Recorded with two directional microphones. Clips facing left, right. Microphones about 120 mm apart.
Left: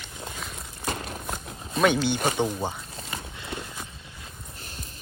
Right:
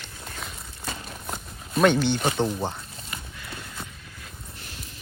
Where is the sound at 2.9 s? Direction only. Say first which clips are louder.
Left 3 dB; 25° left (ahead or behind).